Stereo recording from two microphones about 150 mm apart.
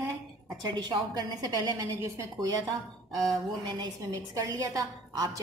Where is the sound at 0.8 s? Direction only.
30° right (ahead or behind).